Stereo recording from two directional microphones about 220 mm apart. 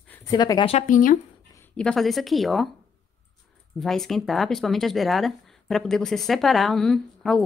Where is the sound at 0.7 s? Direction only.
35° left (ahead or behind).